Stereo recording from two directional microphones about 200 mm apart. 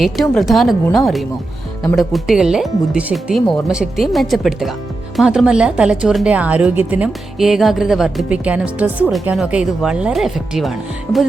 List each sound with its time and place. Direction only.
0.0 s speech: centre (ahead or behind)